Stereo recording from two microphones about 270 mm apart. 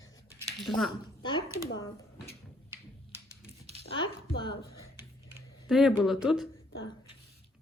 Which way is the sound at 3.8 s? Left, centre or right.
Right.